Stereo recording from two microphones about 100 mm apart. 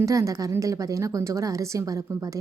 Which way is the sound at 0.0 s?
35° right (ahead or behind).